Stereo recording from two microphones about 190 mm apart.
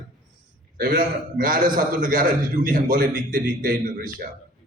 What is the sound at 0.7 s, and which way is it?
A man's voice, 45° right (ahead or behind).